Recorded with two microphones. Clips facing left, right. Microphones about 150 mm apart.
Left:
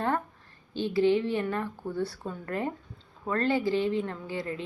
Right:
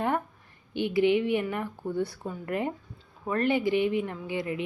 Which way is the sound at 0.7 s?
15° right (ahead or behind).